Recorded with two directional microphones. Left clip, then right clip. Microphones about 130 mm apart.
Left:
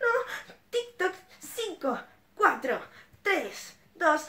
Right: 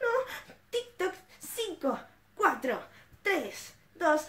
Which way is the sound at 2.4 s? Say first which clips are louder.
Left 3 dB; 50° right (ahead or behind).